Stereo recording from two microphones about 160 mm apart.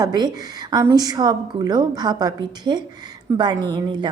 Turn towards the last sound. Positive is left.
turn(degrees=-30)  # may be behind; listen again after turning